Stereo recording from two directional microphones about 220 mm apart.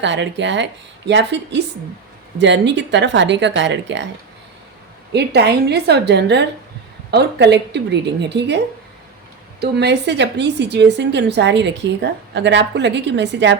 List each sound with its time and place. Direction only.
0.0 s speech: 55° right (ahead or behind)
2.4 s speech: 55° right (ahead or behind)
5.1 s a woman's voice: 50° right (ahead or behind)